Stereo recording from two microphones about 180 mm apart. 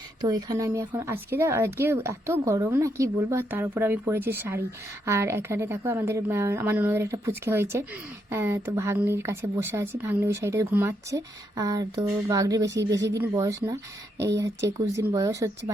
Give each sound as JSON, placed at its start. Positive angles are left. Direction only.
{"t": 0.2, "sound": "speech", "side_deg": -20}